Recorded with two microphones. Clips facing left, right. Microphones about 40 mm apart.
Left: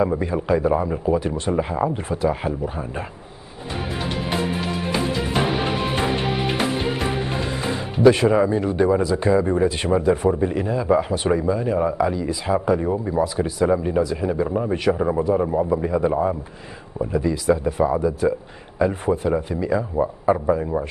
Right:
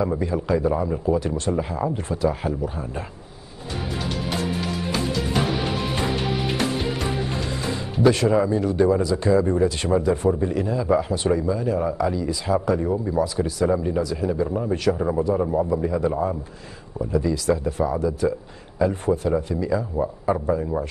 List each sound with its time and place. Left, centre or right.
0.2 s speech: left
3.7 s music: left
17.0 s speech: left